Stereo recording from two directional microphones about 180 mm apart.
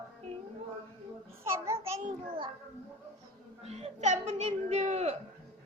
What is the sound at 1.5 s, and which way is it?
Babbling, 15° right (ahead or behind).